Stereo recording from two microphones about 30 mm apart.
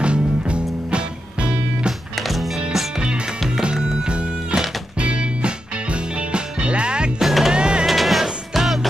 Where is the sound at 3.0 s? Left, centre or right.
Right.